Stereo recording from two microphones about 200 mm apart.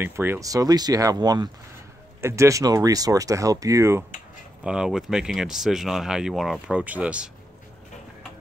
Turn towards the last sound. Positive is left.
turn(degrees=-5)  # may be behind; listen again after turning